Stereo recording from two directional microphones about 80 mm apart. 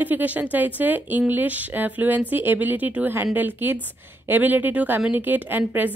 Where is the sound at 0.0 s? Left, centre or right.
Right.